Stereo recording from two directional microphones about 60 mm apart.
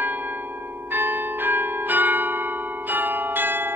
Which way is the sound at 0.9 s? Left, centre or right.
Right.